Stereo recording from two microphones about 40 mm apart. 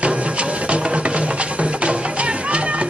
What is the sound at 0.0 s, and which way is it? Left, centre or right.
Music, right.